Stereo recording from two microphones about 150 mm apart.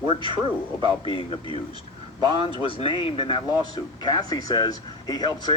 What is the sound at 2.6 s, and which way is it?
Speech, 35° left (ahead or behind).